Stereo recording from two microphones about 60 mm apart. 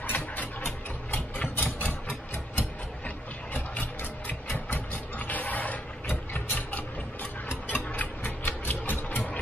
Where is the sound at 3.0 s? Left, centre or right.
Left.